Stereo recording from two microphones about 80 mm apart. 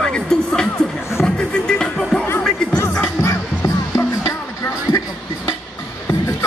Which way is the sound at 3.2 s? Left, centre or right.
Left.